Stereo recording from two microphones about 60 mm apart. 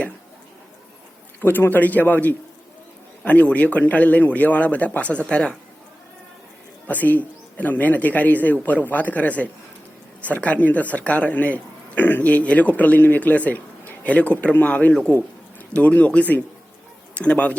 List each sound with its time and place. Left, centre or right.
1.4 s a man's voice: left; by 5.5 s centre
6.8 s speech: left